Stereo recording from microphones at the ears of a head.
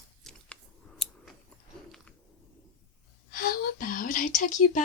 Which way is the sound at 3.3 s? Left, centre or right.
Left.